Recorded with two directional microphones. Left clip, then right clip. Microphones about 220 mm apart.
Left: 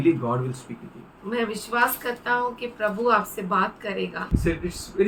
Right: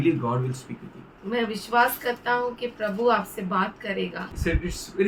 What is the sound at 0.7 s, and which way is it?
Speech, 5° right (ahead or behind).